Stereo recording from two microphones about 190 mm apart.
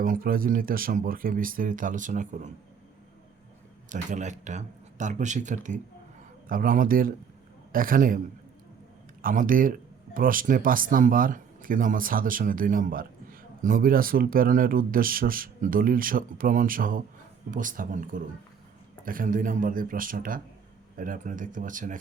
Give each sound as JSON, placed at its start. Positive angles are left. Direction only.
{"t": 0.0, "sound": "speech", "side_deg": -50}
{"t": 3.8, "sound": "speech", "side_deg": -40}
{"t": 9.2, "sound": "speech", "side_deg": -45}